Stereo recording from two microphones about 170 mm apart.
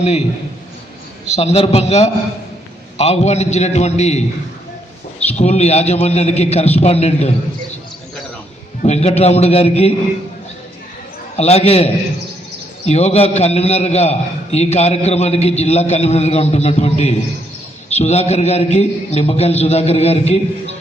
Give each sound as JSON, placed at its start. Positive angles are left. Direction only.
{"t": 0.0, "sound": "a man's voice", "side_deg": 40}
{"t": 1.4, "sound": "a man's voice", "side_deg": 35}
{"t": 5.3, "sound": "a man's voice", "side_deg": 40}
{"t": 8.8, "sound": "a man's voice", "side_deg": 40}
{"t": 11.3, "sound": "a man's voice", "side_deg": 40}